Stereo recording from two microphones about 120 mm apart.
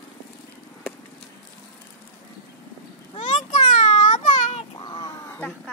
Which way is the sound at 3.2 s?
90° left.